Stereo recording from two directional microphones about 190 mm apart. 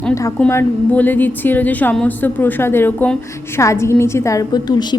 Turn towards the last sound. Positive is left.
turn(degrees=20)  # may be behind; listen again after turning